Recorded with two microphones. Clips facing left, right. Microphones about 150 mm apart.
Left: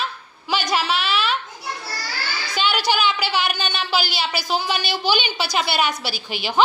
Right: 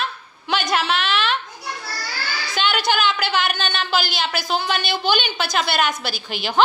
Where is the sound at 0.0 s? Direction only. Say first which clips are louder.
Right 1 dB; 5° left (ahead or behind).